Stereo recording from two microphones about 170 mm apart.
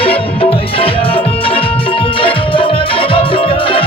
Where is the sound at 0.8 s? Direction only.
35° left (ahead or behind).